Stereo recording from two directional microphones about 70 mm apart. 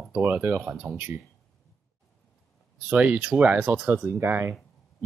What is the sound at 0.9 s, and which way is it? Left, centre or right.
Speech, right.